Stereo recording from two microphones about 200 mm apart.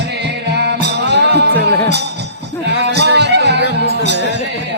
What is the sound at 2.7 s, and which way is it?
Music, 55° right (ahead or behind).